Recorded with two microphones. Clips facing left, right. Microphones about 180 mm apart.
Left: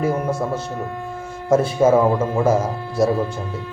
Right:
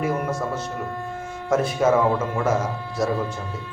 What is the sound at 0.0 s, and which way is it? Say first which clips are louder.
Speech: left 3 dB; 30° left (ahead or behind).